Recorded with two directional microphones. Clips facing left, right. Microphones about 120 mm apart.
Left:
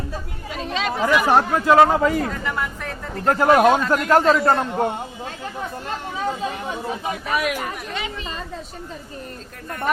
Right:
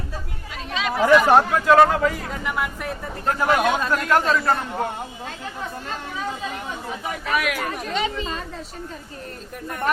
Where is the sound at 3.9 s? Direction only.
25° left (ahead or behind).